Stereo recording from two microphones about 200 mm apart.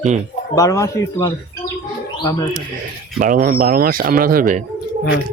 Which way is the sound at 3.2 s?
45° right (ahead or behind).